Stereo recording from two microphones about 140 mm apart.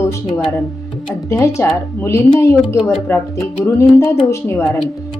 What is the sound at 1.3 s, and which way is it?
Speech, 20° left (ahead or behind).